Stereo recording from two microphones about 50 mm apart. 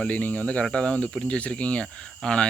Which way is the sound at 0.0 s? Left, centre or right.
Left.